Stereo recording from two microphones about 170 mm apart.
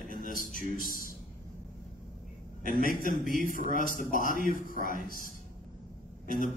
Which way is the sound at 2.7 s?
55° left (ahead or behind).